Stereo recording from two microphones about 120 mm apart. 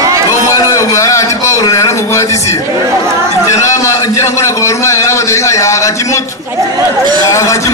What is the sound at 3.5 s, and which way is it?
A man's voice, 25° left (ahead or behind).